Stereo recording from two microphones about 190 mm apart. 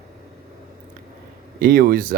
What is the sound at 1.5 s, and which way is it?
Speech, 50° right (ahead or behind).